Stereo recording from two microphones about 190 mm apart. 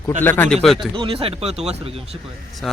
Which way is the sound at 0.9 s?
25° right (ahead or behind).